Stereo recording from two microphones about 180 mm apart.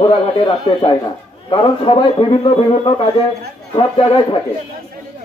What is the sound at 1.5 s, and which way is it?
A man's voice, 25° left (ahead or behind).